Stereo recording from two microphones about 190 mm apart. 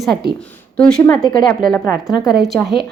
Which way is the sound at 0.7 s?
5° left (ahead or behind).